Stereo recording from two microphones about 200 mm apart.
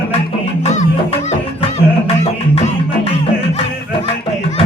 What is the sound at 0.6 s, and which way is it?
Music, 35° left (ahead or behind).